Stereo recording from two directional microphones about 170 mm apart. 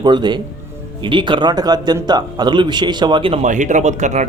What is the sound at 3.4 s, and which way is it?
Speech, 45° right (ahead or behind).